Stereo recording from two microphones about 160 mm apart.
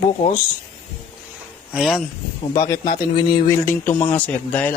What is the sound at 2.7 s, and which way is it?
Speech, 25° left (ahead or behind).